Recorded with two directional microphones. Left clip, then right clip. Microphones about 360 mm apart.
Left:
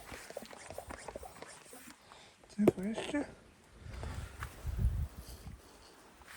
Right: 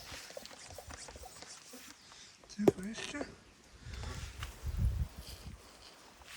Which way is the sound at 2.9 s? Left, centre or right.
Centre.